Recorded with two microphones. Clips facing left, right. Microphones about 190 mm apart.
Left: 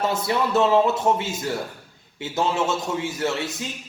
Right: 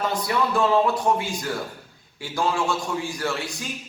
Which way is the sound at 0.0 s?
25° left (ahead or behind).